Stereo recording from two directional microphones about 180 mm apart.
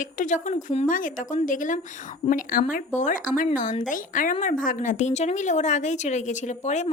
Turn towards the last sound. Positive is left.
turn(degrees=40)  # may be behind; listen again after turning